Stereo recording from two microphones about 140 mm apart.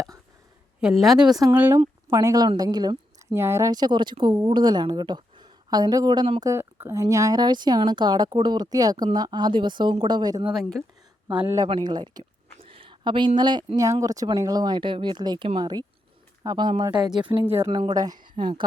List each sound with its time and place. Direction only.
0.8 s a woman's voice: 5° right (ahead or behind)
1.3 s speech: 25° right (ahead or behind)
1.5 s speech: 15° right (ahead or behind)
2.0 s a woman's voice: 25° right (ahead or behind)
6.4 s speech: 20° right (ahead or behind)
10.5 s a woman's voice: centre (ahead or behind)
11.3 s speech: 15° right (ahead or behind)
11.6 s speech: 30° right (ahead or behind)
17.4 s speech: 15° right (ahead or behind)
17.7 s speech: 35° right (ahead or behind)